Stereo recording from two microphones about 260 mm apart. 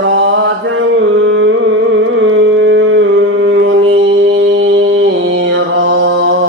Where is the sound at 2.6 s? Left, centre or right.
Right.